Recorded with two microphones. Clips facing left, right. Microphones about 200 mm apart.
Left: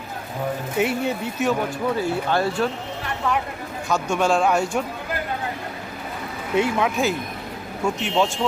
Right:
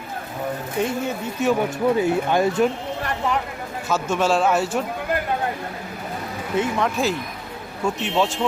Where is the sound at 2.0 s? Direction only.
20° right (ahead or behind).